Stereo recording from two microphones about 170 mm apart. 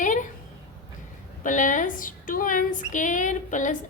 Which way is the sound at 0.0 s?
50° left (ahead or behind).